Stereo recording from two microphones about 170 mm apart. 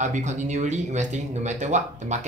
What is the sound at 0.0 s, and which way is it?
Speech, 45° right (ahead or behind).